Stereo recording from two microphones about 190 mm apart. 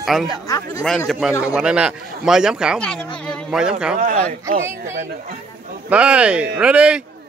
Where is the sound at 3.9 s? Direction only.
45° right (ahead or behind).